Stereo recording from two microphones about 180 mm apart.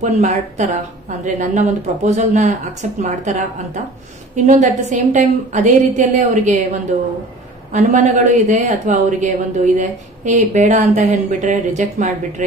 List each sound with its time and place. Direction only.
0.0 s a woman's voice: 45° right (ahead or behind)